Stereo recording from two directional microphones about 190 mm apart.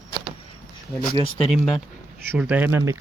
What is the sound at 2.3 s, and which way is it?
Speech, 10° right (ahead or behind).